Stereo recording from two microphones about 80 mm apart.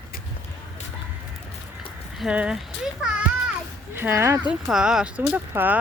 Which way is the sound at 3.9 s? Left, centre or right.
Right.